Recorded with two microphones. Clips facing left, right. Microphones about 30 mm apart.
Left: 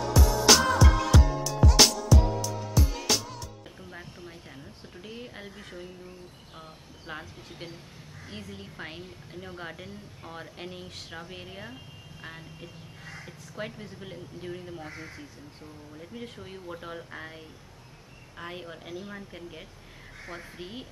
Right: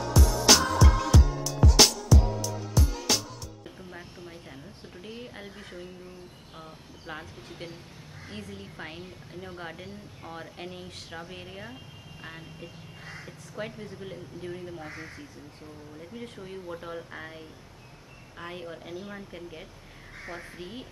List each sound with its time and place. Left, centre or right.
0.0 s music: centre
4.9 s a woman's voice: centre
7.1 s a woman's voice: centre
13.0 s crow: centre
13.6 s a woman's voice: centre
18.4 s a woman's voice: centre